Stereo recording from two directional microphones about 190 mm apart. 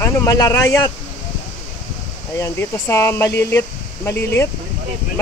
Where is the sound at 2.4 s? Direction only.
15° left (ahead or behind).